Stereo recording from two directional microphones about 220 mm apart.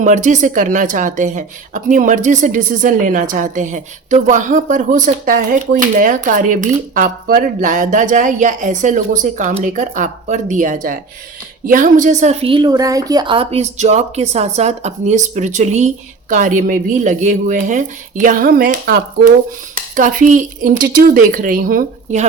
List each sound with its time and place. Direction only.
0.0 s a woman's voice: 35° right (ahead or behind)